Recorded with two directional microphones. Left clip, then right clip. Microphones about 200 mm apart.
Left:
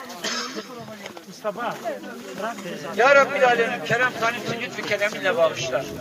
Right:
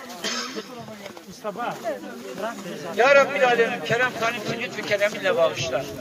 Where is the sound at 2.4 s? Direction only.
60° right (ahead or behind).